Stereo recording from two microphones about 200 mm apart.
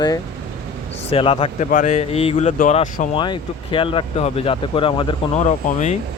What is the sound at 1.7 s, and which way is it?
Speech, 35° left (ahead or behind).